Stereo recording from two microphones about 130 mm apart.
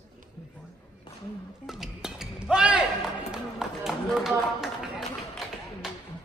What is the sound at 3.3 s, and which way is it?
Run, centre (ahead or behind).